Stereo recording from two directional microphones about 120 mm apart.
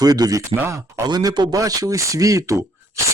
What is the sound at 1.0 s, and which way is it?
Speech, 35° right (ahead or behind).